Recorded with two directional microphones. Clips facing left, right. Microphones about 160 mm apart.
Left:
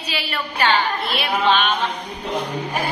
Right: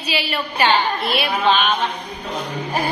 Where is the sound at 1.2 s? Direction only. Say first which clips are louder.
Even; centre (ahead or behind).